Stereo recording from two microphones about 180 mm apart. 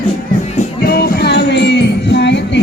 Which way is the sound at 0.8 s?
60° left (ahead or behind).